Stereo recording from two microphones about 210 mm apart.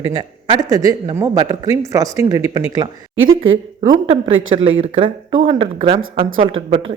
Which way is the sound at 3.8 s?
35° right (ahead or behind).